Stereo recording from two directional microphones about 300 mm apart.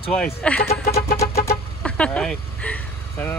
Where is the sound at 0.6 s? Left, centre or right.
Left.